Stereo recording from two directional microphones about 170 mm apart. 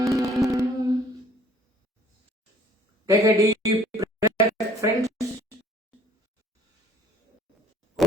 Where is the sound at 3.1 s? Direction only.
20° right (ahead or behind).